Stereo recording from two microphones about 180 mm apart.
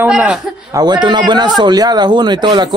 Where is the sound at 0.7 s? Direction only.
20° right (ahead or behind).